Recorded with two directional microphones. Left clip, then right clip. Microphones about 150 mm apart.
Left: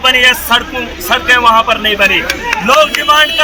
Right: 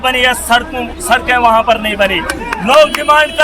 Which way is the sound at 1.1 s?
35° right (ahead or behind).